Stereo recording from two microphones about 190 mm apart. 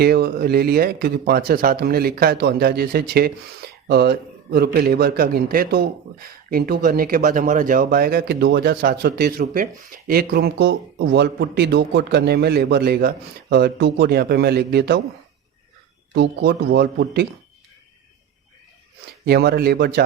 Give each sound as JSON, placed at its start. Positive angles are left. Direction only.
{"t": 0.0, "sound": "speech", "side_deg": -55}
{"t": 16.1, "sound": "speech", "side_deg": -65}
{"t": 19.2, "sound": "speech", "side_deg": -55}